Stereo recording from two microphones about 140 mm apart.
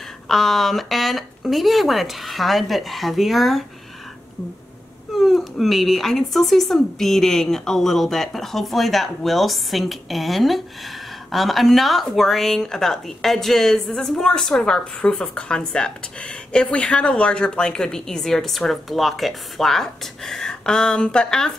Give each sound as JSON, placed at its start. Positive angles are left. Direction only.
{"t": 0.3, "sound": "speech", "side_deg": 0}
{"t": 5.1, "sound": "speech", "side_deg": 0}